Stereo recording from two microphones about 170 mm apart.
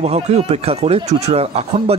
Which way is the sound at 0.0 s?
40° right (ahead or behind).